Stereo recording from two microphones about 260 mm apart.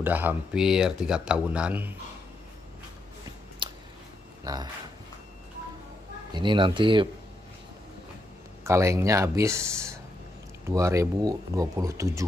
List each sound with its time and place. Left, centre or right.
0.0 s speech: centre
3.6 s a sound: centre
4.5 s speech: centre
6.3 s speech: centre
8.6 s speech: centre